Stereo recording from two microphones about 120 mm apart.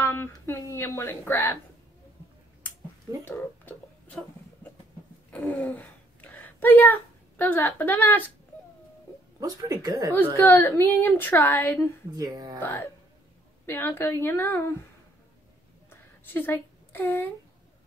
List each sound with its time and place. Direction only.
0.0 s speech: 20° left (ahead or behind)
3.3 s a sound: 15° left (ahead or behind)
5.3 s a sound: 5° left (ahead or behind)
7.3 s a woman's voice: 15° left (ahead or behind)
9.4 s speech: 30° right (ahead or behind)
10.1 s a woman's voice: 20° left (ahead or behind)
12.1 s speech: 30° right (ahead or behind)
12.5 s a woman's voice: 20° left (ahead or behind)
15.9 s a sound: 20° left (ahead or behind)